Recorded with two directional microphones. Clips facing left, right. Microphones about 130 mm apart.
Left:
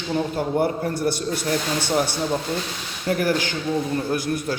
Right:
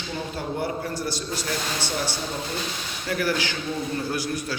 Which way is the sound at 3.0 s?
45° left (ahead or behind).